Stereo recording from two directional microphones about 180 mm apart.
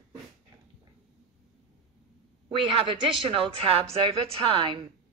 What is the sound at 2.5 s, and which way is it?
Speech, 30° right (ahead or behind).